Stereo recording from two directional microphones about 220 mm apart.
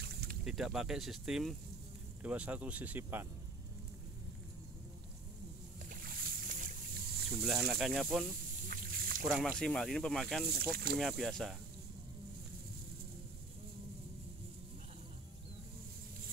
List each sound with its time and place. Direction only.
0.0 s boat: 45° right (ahead or behind)
0.5 s speech: centre (ahead or behind)
5.9 s boat: 40° right (ahead or behind)
7.2 s speech: centre (ahead or behind)
8.6 s a sound: 40° right (ahead or behind)
9.3 s speech: centre (ahead or behind)
10.4 s speech: 45° right (ahead or behind)
11.0 s speech: centre (ahead or behind)